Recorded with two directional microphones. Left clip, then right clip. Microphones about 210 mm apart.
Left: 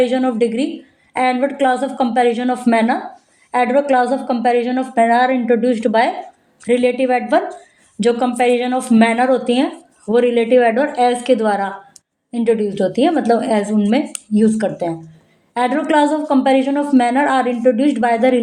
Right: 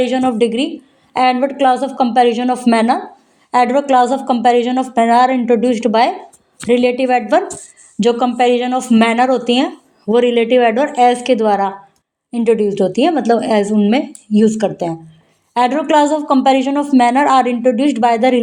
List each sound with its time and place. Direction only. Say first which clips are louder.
0.0 s a man's voice: right 1 dB; 25° right (ahead or behind)